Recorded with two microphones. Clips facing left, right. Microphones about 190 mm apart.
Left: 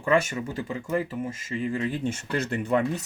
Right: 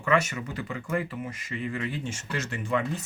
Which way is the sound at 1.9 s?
55° left (ahead or behind).